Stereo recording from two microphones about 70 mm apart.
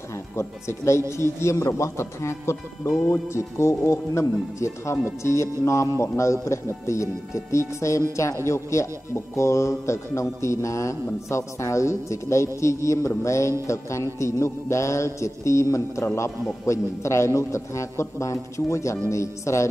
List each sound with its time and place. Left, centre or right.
0.4 s music: left